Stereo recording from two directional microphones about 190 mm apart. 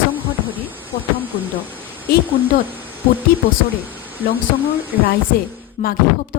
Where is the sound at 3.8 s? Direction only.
10° right (ahead or behind).